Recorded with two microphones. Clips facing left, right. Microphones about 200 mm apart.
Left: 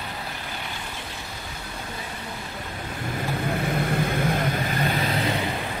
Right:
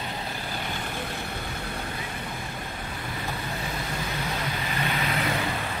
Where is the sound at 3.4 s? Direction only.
55° left (ahead or behind).